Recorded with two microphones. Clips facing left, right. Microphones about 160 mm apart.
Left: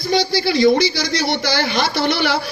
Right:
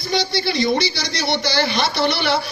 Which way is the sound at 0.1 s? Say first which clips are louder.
Left 4 dB; 50° left (ahead or behind).